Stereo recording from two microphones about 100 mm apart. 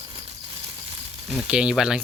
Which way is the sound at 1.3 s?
5° right (ahead or behind).